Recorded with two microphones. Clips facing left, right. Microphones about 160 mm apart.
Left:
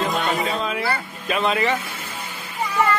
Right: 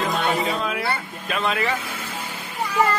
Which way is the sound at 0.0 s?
Centre (ahead or behind).